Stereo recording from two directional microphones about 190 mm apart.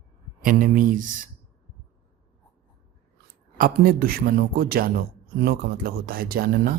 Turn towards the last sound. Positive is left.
turn(degrees=-50)  # may be behind; listen again after turning